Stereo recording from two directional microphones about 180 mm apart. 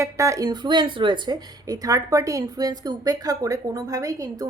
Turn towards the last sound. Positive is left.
turn(degrees=-20)  # may be behind; listen again after turning